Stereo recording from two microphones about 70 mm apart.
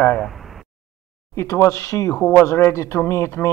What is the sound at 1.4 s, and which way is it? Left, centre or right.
Speech, left.